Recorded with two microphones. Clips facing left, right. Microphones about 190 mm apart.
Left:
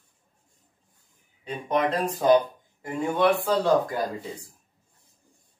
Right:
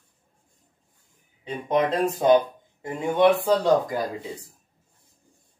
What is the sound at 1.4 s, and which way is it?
Speech, 20° right (ahead or behind).